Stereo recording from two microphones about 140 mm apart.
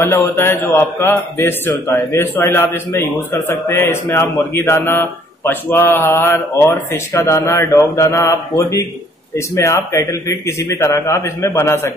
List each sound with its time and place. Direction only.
0.0 s a man's voice: 20° left (ahead or behind)